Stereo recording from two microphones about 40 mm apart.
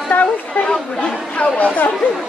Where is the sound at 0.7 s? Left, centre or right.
Left.